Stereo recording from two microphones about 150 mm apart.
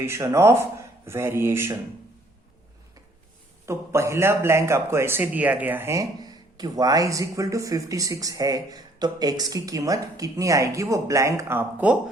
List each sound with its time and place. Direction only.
0.0 s speech: 20° right (ahead or behind)
3.7 s speech: 20° right (ahead or behind)